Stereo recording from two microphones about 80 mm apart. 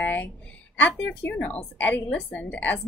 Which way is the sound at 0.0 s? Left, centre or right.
Left.